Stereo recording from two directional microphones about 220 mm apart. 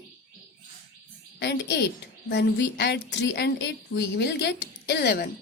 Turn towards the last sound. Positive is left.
turn(degrees=50)  # may be behind; listen again after turning